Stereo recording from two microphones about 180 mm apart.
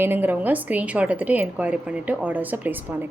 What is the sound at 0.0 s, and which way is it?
A woman's voice, 10° right (ahead or behind).